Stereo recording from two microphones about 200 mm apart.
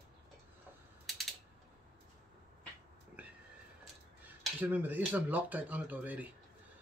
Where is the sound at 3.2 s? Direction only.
5° right (ahead or behind).